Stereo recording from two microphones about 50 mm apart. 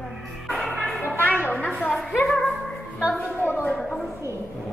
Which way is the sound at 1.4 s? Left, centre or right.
Left.